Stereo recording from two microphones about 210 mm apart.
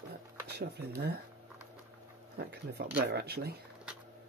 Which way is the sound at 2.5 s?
50° right (ahead or behind).